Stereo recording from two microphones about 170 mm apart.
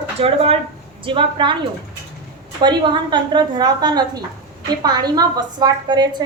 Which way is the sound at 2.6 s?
25° right (ahead or behind).